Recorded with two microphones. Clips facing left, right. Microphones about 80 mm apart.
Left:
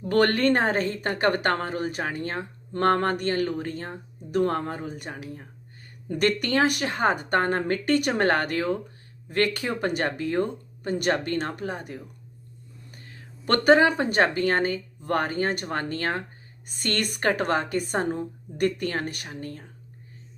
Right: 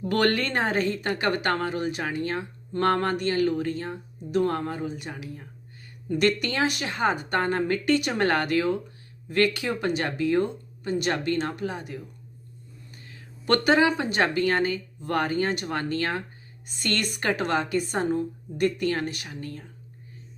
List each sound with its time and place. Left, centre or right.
0.1 s a woman's voice: left